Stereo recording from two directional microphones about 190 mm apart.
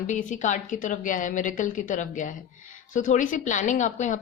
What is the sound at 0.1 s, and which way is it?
A woman's voice, 40° left (ahead or behind).